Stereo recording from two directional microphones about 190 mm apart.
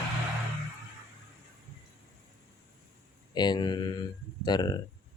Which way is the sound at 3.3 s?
20° left (ahead or behind).